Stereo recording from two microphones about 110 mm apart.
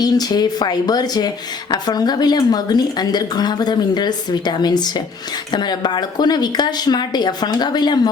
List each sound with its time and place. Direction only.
0.0 s speech: 35° left (ahead or behind)